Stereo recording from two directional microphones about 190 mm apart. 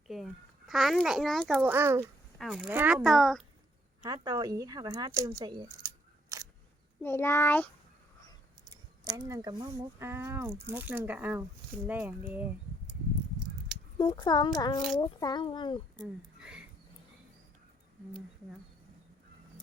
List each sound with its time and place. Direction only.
0.7 s speech: centre (ahead or behind)
1.6 s speech: 10° right (ahead or behind)
2.4 s speech: centre (ahead or behind)
4.0 s speech: 20° right (ahead or behind)
5.8 s a sound: 15° right (ahead or behind)
7.0 s a child's voice: 10° left (ahead or behind)
8.7 s speech: 20° right (ahead or behind)
14.0 s a child's voice: 20° left (ahead or behind)
16.4 s a sound: 5° right (ahead or behind)